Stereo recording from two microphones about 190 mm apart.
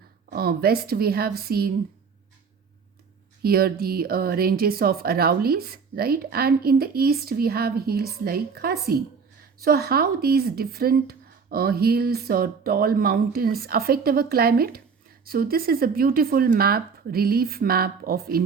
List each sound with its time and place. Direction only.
0.3 s speech: 55° right (ahead or behind)
3.4 s speech: 55° right (ahead or behind)